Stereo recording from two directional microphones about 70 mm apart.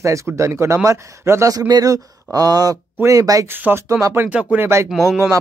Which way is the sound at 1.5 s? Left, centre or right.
Right.